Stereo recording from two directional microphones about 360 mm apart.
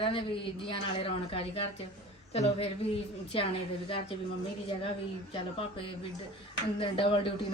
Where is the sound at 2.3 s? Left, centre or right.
Centre.